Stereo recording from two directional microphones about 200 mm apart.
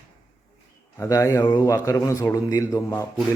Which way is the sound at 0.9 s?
15° left (ahead or behind).